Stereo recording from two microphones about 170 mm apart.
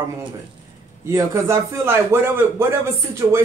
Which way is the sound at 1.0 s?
15° right (ahead or behind).